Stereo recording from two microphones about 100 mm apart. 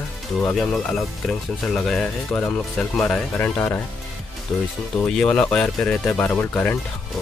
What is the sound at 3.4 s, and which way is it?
Speech, 20° left (ahead or behind).